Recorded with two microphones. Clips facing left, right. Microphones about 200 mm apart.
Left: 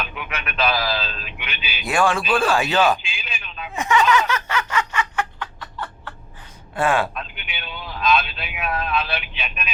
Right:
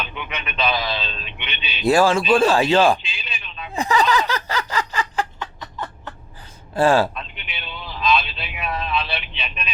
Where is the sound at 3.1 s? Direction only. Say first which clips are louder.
Left 1 dB; centre (ahead or behind).